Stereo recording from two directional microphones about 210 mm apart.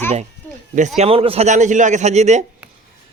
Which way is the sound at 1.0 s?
25° right (ahead or behind).